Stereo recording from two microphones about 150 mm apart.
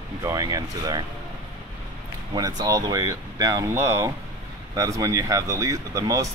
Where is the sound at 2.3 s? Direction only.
25° right (ahead or behind).